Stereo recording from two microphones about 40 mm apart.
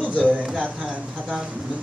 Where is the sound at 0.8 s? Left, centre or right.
Centre.